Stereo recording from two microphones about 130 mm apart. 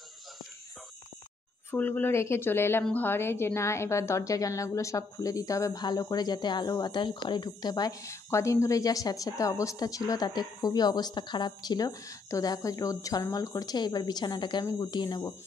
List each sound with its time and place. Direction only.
1.7 s a woman's voice: 15° left (ahead or behind); by 15.3 s 30° left (ahead or behind)